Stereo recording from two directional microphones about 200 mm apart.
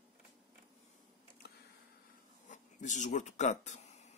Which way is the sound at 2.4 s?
40° left (ahead or behind).